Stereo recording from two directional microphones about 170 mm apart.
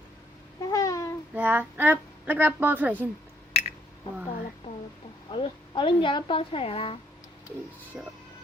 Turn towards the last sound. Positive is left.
turn(degrees=35)  # may be behind; listen again after turning